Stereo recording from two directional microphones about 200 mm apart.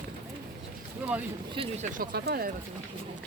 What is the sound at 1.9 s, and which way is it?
Speech, 50° right (ahead or behind).